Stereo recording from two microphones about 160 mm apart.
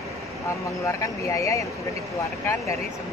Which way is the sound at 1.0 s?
20° left (ahead or behind).